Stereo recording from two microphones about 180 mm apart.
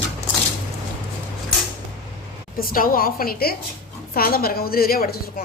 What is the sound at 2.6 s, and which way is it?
A woman's voice, 55° left (ahead or behind).